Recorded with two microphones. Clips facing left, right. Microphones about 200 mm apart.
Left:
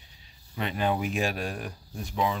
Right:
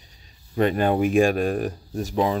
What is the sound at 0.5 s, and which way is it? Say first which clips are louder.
Speech: right 8 dB; 50° right (ahead or behind).